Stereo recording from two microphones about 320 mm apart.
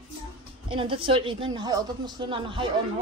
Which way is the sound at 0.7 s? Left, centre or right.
Centre.